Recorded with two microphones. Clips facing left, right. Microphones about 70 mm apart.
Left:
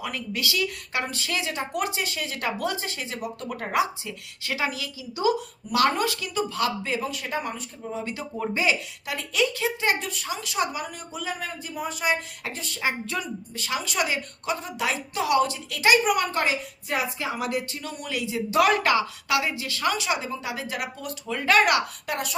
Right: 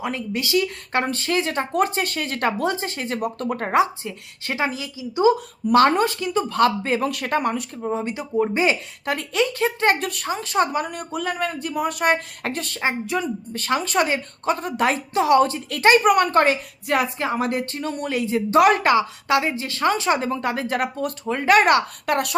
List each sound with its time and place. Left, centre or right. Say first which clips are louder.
0.0 s speech: right 4 dB; right
1.0 s a woman's voice: right 7 dB; right
2.6 s a woman's voice: right 5 dB; right
6.5 s a woman's voice: right 8 dB; right
7.0 s speech: right 7 dB; right
7.9 s speech: right 8 dB; right
8.6 s a woman's voice: right 4 dB; right
10.3 s speech: right 7 dB; right
12.8 s speech: right 4 dB; right
13.5 s a woman's voice: right 8 dB; right
15.1 s a woman's voice: right 5 dB; right
18.6 s a woman's voice: right 3 dB; right
21.4 s speech: right 4 dB; right
22.0 s speech: right 8 dB; right